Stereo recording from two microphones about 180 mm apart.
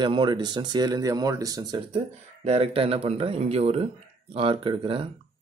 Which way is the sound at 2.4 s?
35° right (ahead or behind).